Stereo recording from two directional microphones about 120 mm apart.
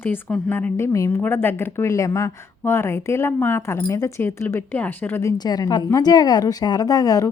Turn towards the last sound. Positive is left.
turn(degrees=30)  # may be behind; listen again after turning